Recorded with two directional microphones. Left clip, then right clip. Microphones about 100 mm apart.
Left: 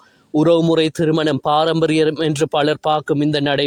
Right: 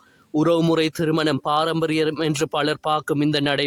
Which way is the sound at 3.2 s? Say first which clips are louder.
Left 3 dB; 25° left (ahead or behind).